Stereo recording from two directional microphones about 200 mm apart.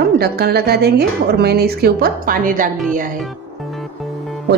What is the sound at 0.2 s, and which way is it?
A woman's voice, 55° right (ahead or behind).